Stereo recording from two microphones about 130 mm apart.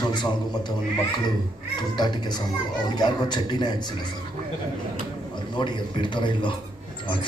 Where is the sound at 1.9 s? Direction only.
35° left (ahead or behind).